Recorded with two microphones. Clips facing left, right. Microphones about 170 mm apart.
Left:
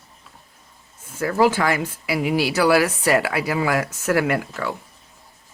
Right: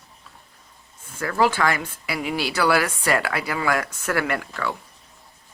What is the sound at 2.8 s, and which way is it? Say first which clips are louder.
Speech: left 4 dB; 25° left (ahead or behind).